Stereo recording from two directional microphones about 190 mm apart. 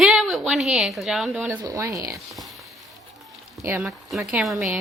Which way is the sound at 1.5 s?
15° right (ahead or behind).